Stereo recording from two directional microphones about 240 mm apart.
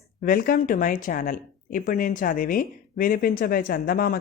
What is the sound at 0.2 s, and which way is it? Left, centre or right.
Speech, left.